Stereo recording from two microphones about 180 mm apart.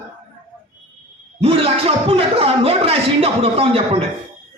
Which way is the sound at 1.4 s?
30° right (ahead or behind).